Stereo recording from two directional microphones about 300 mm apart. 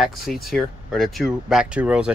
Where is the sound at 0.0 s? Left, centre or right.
Centre.